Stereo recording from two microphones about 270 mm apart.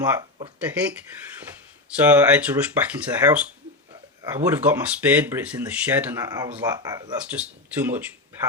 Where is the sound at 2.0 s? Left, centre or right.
Centre.